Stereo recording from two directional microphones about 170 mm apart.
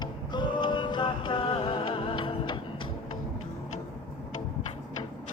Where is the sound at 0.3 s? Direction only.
25° left (ahead or behind).